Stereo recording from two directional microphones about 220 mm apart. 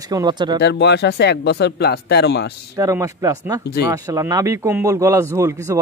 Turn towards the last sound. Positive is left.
turn(degrees=-10)  # may be behind; listen again after turning